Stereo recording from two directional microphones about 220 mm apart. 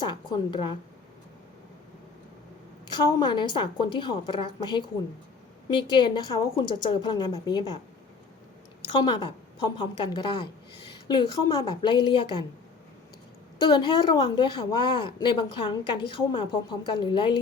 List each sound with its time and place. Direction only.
0.0 s a woman's voice: 20° left (ahead or behind)
2.9 s a woman's voice: 20° left (ahead or behind)
8.9 s a woman's voice: 20° left (ahead or behind)
13.6 s a woman's voice: 20° left (ahead or behind)